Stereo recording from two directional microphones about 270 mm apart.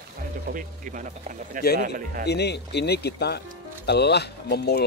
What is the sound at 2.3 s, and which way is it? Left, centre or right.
Speech, left.